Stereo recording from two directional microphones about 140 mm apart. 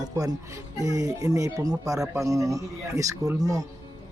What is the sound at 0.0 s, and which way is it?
Music, 30° right (ahead or behind).